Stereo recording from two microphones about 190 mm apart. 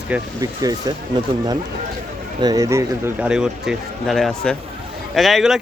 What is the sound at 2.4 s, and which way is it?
Speech, 20° right (ahead or behind).